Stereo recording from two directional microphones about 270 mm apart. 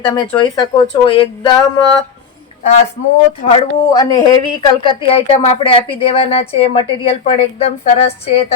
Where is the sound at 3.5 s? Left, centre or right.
Centre.